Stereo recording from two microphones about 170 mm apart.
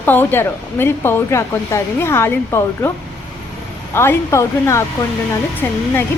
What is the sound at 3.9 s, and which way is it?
A woman's voice, 15° left (ahead or behind).